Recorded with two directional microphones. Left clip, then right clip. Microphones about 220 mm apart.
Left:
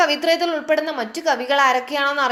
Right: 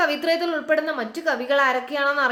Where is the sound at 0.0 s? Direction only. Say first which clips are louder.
Left 4 dB; 5° right (ahead or behind).